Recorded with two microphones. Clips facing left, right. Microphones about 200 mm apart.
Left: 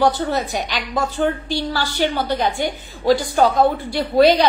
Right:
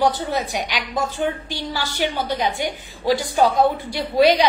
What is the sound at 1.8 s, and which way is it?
Speech, 45° left (ahead or behind).